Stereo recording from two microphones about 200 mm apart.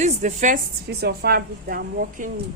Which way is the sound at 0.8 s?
50° right (ahead or behind).